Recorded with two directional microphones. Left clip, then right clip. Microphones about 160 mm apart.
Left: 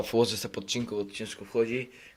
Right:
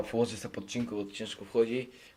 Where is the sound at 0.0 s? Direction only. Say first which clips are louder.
Left 5 dB; 40° left (ahead or behind).